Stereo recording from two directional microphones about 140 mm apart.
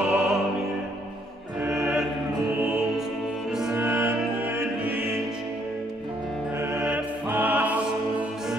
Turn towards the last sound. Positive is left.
turn(degrees=-10)  # may be behind; listen again after turning